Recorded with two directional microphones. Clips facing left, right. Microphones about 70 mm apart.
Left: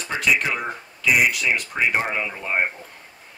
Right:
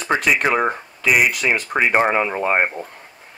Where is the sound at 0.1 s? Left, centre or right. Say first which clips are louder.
Right 5 dB; right.